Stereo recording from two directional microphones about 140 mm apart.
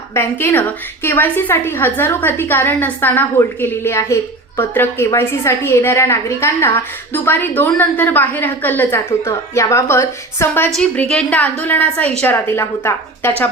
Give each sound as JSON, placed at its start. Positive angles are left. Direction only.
{"t": 0.1, "sound": "a woman's voice", "side_deg": 15}